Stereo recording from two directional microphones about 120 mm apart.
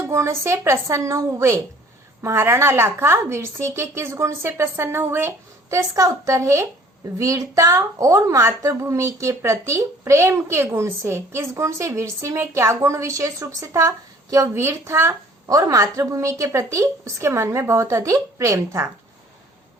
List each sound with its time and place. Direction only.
0.0 s a woman's voice: 25° right (ahead or behind)